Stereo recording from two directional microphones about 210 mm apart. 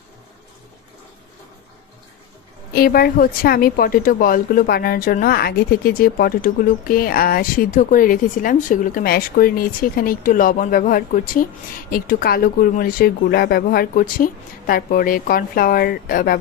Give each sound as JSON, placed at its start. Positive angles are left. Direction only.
{"t": 2.7, "sound": "a woman's voice", "side_deg": 45}